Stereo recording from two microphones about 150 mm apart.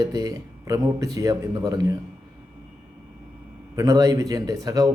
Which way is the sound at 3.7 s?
25° right (ahead or behind).